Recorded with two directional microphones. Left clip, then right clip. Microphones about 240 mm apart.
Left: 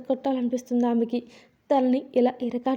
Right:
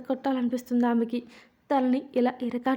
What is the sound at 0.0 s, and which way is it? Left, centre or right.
A woman's voice, centre.